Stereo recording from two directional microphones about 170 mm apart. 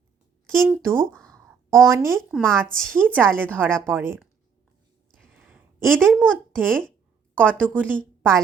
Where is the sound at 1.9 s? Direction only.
15° right (ahead or behind).